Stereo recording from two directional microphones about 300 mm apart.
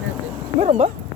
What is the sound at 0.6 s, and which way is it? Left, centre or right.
Speech, right.